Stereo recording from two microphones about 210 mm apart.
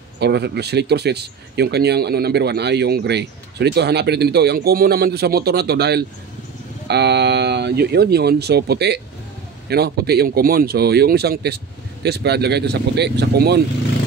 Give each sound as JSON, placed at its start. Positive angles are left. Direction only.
{"t": 0.2, "sound": "speech", "side_deg": -50}